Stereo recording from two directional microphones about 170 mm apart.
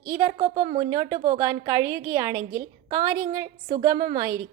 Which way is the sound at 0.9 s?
25° right (ahead or behind).